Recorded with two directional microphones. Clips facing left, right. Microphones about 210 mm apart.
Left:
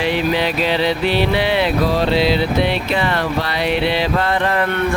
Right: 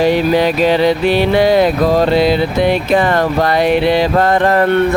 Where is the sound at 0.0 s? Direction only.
45° right (ahead or behind).